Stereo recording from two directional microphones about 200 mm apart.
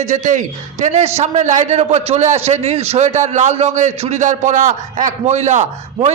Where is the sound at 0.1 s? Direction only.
35° right (ahead or behind).